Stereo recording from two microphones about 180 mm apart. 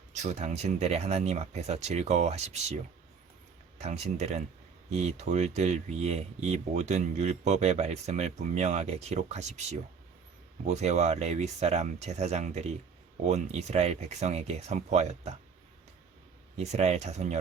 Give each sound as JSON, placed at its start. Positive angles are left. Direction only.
{"t": 0.1, "sound": "speech", "side_deg": -40}
{"t": 3.8, "sound": "speech", "side_deg": -35}
{"t": 16.7, "sound": "speech", "side_deg": -40}